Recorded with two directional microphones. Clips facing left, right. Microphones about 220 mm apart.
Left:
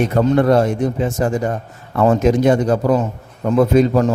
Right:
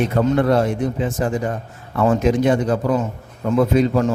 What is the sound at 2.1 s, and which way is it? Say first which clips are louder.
A man's voice: left 3 dB; 40° left (ahead or behind).